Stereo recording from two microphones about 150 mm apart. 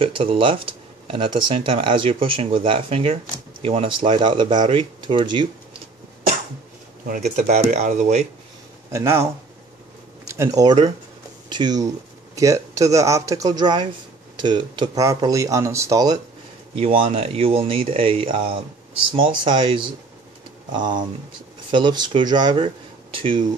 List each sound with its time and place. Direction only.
0.0 s speech: 35° right (ahead or behind)
7.1 s speech: 55° right (ahead or behind)
8.9 s speech: 20° right (ahead or behind)
16.7 s speech: 35° right (ahead or behind)